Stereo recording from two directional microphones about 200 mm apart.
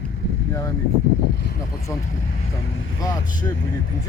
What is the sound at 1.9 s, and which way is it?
Speech, 15° left (ahead or behind).